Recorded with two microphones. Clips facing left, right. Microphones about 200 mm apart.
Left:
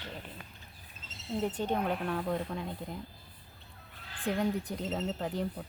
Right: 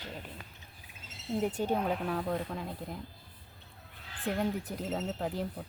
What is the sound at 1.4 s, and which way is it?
Speech, 10° right (ahead or behind).